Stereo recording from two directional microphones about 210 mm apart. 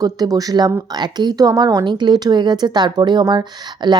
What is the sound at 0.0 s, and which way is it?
A woman's voice, 15° right (ahead or behind).